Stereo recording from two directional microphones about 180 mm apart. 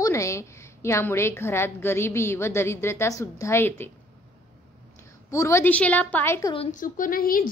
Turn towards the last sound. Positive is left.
turn(degrees=50)  # may be behind; listen again after turning